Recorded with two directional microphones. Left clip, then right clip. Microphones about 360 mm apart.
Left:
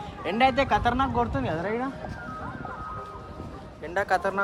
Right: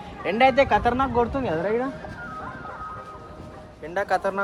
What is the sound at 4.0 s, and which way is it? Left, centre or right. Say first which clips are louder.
Speech: right 1 dB; centre.